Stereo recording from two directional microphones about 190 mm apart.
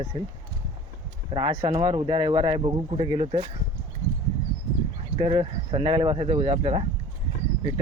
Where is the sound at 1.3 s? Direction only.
30° right (ahead or behind).